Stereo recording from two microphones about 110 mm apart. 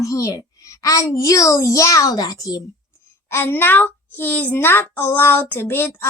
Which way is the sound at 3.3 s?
20° left (ahead or behind).